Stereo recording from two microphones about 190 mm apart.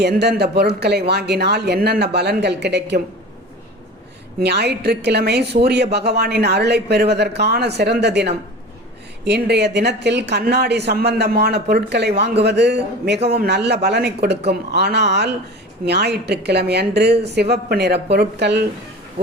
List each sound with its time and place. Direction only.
0.0 s a woman's voice: 60° right (ahead or behind)
4.4 s a woman's voice: 60° right (ahead or behind)